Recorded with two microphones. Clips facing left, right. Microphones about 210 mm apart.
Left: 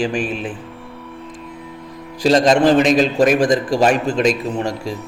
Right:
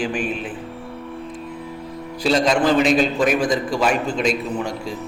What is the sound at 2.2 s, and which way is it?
A man's voice, 40° left (ahead or behind).